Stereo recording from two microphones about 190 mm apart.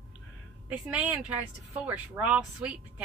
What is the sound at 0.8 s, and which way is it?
Speech, 5° right (ahead or behind).